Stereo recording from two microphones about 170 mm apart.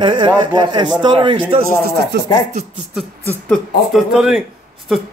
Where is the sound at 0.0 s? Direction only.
25° right (ahead or behind).